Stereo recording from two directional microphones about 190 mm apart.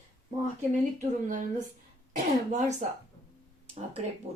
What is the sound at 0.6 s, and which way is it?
Speech, 40° right (ahead or behind).